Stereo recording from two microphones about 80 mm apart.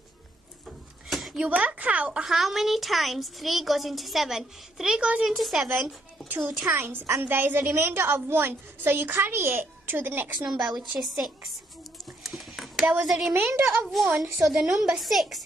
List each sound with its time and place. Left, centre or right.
0.7 s a sound: centre
1.5 s speech: centre
2.3 s a woman's voice: centre
6.2 s a woman's voice: right
11.1 s a woman's voice: centre
12.2 s a sound: centre
13.0 s a woman's voice: centre
13.3 s a woman's voice: right
13.7 s a woman's voice: centre